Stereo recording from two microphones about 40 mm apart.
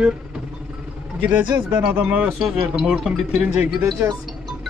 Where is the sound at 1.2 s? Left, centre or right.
Right.